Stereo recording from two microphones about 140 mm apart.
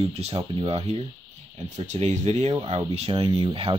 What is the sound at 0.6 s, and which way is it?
Speech, 45° right (ahead or behind).